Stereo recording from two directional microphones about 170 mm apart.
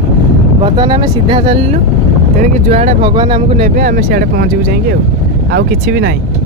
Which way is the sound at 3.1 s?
25° right (ahead or behind).